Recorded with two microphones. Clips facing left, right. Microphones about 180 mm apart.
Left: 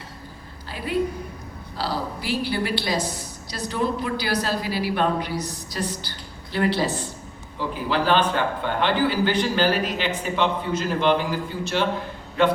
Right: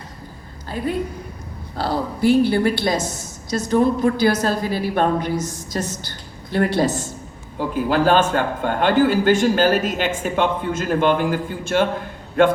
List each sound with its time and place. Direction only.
1.7 s a woman's voice: 55° right (ahead or behind)